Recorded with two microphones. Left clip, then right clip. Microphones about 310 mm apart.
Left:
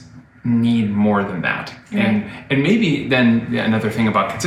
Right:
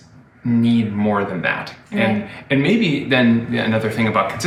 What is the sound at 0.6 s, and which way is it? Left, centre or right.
A man's voice, centre.